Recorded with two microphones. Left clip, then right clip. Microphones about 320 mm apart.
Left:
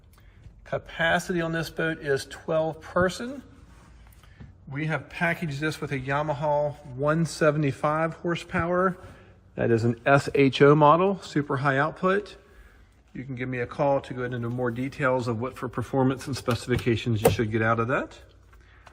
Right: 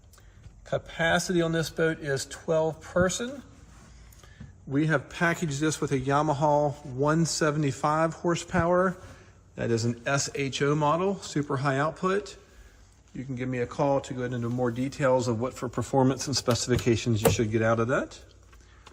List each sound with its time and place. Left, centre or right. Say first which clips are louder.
0.6 s a man's voice: left 1 dB; centre
4.7 s a man's voice: right 4 dB; centre